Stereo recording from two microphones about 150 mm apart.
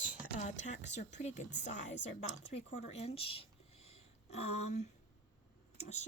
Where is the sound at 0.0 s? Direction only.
55° left (ahead or behind).